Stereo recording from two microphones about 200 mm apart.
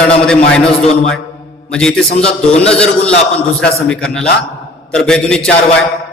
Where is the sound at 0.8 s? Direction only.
30° left (ahead or behind).